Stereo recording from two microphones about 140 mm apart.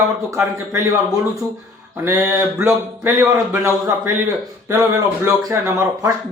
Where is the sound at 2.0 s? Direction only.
20° right (ahead or behind).